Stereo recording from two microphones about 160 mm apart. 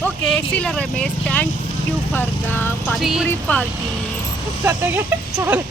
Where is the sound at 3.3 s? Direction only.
10° left (ahead or behind).